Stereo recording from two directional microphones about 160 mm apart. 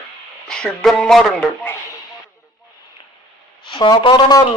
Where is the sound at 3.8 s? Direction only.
30° left (ahead or behind).